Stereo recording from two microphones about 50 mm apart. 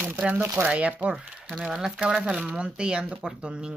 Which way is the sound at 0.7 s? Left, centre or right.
Right.